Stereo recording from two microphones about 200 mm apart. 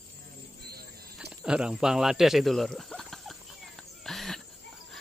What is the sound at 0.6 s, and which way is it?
Cricket, 50° right (ahead or behind).